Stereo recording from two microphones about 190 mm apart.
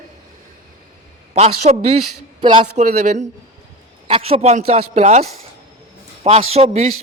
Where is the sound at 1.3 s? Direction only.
35° right (ahead or behind).